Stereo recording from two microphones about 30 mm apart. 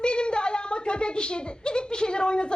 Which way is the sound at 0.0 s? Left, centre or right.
Left.